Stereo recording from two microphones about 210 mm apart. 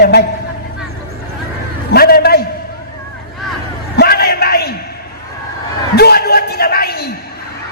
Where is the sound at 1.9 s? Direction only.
50° left (ahead or behind).